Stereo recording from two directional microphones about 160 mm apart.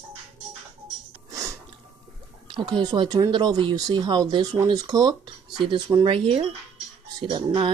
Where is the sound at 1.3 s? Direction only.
20° right (ahead or behind).